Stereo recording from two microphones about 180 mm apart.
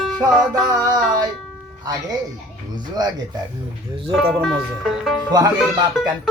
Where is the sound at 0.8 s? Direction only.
20° right (ahead or behind).